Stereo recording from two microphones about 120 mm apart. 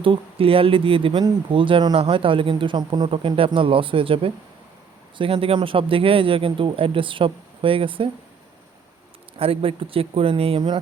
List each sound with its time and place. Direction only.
0.0 s speech: 50° right (ahead or behind)
9.4 s speech: 50° right (ahead or behind)